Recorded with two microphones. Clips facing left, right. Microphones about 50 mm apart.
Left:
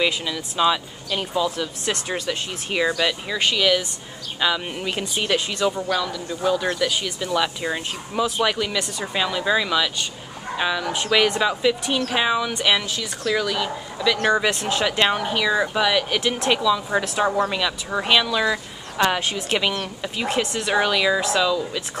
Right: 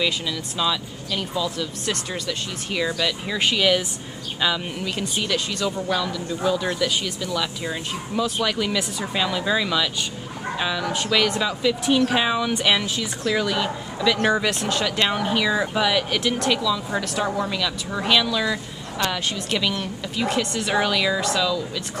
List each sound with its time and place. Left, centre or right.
0.0 s speech: centre
3.3 s speech: centre
4.4 s speech: centre
4.7 s speech: left; by 7.1 s centre
7.2 s speech: left
8.5 s speech: centre
15.1 s speech: centre; by 20.4 s left
20.5 s speech: centre